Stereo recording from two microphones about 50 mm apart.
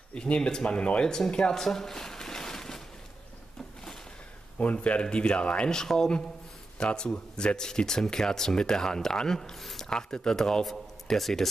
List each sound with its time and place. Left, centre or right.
0.1 s speech: centre
1.1 s speech: centre
4.6 s a man's voice: left; by 11.4 s centre